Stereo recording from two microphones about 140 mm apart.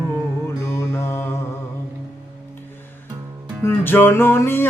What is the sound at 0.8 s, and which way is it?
Mantra, 20° left (ahead or behind).